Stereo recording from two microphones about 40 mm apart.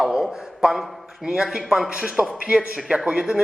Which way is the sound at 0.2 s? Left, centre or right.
Centre.